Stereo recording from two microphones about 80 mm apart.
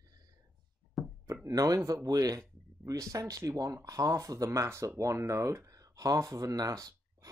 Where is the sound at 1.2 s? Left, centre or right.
Right.